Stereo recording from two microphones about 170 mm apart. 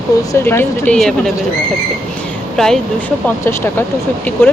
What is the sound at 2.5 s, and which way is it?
Speech, centre (ahead or behind).